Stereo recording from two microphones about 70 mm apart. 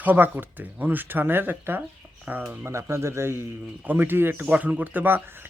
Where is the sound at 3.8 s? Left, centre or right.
Right.